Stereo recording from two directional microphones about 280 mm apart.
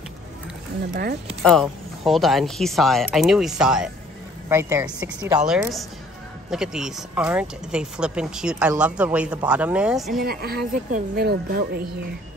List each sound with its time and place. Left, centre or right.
1.4 s speech: centre
10.2 s speech: right